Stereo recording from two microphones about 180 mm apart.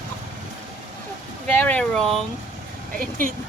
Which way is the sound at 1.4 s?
5° left (ahead or behind).